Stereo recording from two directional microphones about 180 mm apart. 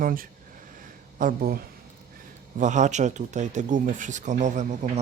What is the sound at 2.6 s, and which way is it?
Speech, 45° right (ahead or behind).